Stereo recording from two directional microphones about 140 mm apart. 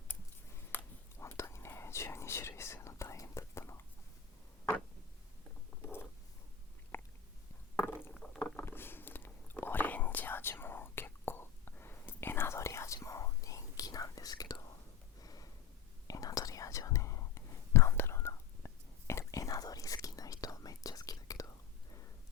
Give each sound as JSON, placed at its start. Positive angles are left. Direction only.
{"t": 0.1, "sound": "scissors", "side_deg": 10}
{"t": 1.1, "sound": "whispering", "side_deg": 20}
{"t": 5.8, "sound": "a sound", "side_deg": 15}
{"t": 6.9, "sound": "biting", "side_deg": 15}
{"t": 7.8, "sound": "a sound", "side_deg": 15}
{"t": 8.4, "sound": "whispering", "side_deg": 15}
{"t": 15.2, "sound": "snort", "side_deg": 25}
{"t": 16.0, "sound": "whispering", "side_deg": 25}